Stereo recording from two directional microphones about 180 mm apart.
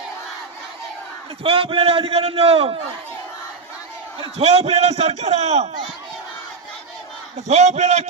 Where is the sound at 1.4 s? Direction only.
30° right (ahead or behind).